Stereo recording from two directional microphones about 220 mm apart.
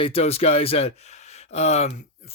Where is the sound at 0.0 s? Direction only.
25° left (ahead or behind).